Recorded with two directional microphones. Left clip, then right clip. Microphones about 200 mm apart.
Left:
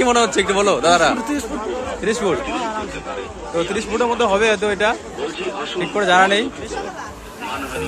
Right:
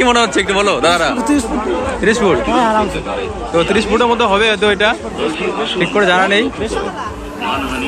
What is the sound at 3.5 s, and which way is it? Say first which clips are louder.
A man's voice: right 7 dB; 5° left (ahead or behind).